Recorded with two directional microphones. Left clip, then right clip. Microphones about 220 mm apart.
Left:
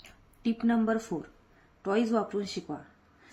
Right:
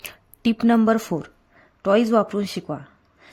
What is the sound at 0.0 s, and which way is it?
Speech, 55° right (ahead or behind).